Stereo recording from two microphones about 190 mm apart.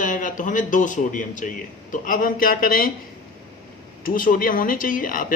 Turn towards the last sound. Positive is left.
turn(degrees=45)  # may be behind; listen again after turning